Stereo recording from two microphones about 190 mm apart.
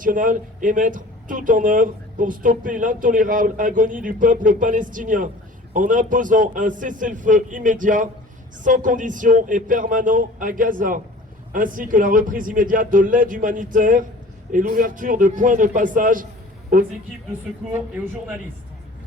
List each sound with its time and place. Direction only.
0.0 s speech: 45° right (ahead or behind)